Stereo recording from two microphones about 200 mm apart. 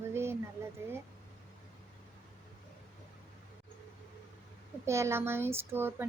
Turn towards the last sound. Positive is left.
turn(degrees=-10)  # may be behind; listen again after turning